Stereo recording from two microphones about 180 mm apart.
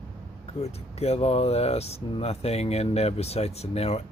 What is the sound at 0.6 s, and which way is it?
Speech, 35° left (ahead or behind).